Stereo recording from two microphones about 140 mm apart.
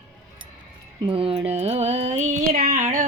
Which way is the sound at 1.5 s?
50° right (ahead or behind).